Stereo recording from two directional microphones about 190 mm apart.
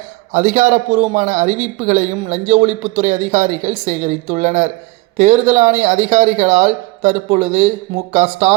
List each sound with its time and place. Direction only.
0.3 s a man's voice: 40° right (ahead or behind)